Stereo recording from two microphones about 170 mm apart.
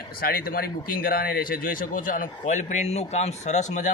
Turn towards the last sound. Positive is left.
turn(degrees=45)  # may be behind; listen again after turning